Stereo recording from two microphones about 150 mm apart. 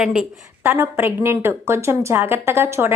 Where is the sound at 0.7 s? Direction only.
15° right (ahead or behind).